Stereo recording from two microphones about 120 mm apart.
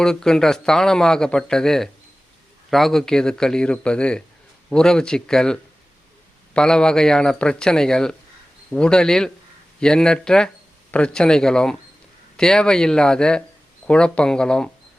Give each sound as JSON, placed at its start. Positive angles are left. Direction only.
{"t": 0.0, "sound": "speech", "side_deg": 5}